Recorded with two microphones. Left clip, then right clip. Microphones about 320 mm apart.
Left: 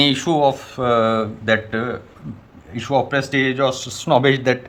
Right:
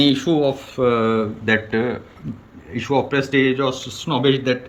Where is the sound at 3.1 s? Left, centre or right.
Left.